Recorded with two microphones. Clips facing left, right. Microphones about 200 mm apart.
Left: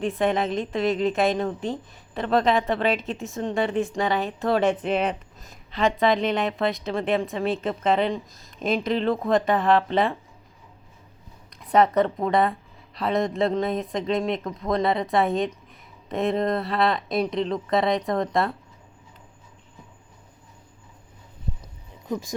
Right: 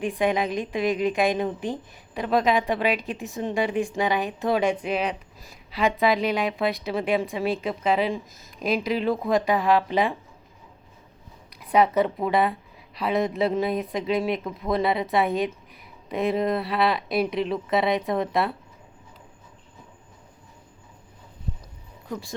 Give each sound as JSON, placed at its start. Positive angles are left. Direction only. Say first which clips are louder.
{"t": 0.0, "sound": "a woman's voice", "louder": "left 1 dB", "side_deg": -15}
{"t": 11.7, "sound": "speech", "louder": "left 1 dB", "side_deg": 0}
{"t": 22.0, "sound": "speech", "louder": "left 4 dB", "side_deg": 20}